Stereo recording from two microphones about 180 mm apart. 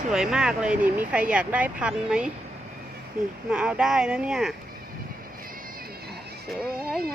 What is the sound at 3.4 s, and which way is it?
Speech, 5° right (ahead or behind).